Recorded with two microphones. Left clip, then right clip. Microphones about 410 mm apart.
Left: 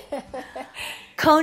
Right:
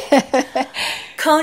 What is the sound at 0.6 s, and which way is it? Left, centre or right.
Speech, right.